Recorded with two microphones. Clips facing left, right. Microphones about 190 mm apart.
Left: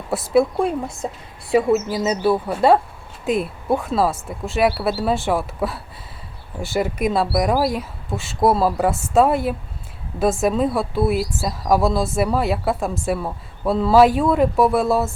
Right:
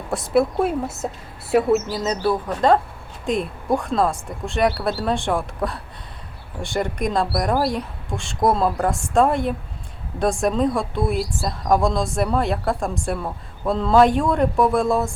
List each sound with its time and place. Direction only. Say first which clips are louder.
0.1 s speech: left 2 dB; centre (ahead or behind)